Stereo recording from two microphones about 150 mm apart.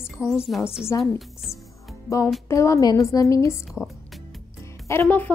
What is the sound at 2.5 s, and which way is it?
A woman's voice, 20° left (ahead or behind).